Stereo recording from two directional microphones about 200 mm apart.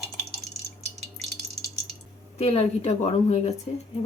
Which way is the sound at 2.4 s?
30° left (ahead or behind).